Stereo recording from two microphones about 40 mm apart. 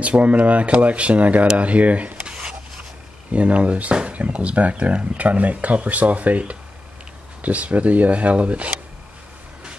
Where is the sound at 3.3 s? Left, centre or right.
Right.